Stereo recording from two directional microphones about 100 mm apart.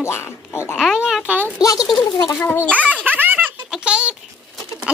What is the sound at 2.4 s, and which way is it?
Speech, 20° left (ahead or behind).